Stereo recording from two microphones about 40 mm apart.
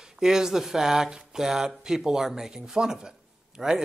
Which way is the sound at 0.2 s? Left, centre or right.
Centre.